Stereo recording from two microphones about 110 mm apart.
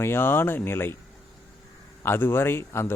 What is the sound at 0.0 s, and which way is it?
Speech, 20° left (ahead or behind).